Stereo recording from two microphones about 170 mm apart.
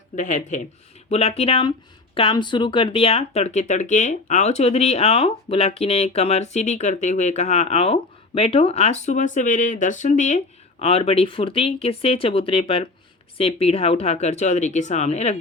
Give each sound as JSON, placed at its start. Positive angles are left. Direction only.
{"t": 0.2, "sound": "speech", "side_deg": 45}